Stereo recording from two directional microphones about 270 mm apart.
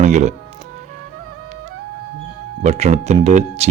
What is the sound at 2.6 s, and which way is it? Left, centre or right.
A man's voice, right.